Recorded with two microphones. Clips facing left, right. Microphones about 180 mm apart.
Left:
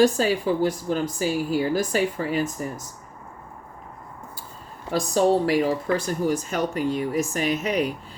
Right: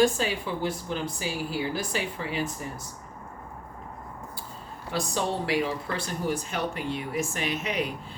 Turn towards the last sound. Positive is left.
turn(degrees=40)  # may be behind; listen again after turning